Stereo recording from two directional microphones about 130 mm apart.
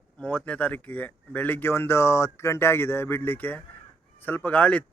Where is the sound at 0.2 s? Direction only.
10° left (ahead or behind).